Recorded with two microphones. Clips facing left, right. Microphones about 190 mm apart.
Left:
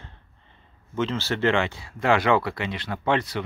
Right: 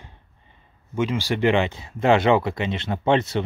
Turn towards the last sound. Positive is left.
turn(degrees=-25)  # may be behind; listen again after turning